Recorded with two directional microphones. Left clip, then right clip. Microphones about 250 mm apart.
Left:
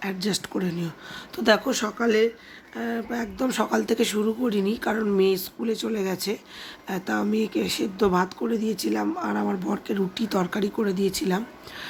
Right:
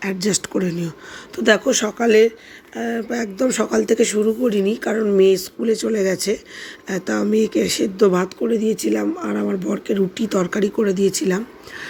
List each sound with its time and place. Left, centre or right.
0.0 s speech: centre